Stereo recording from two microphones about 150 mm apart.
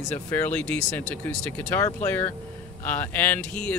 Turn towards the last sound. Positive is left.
turn(degrees=10)  # may be behind; listen again after turning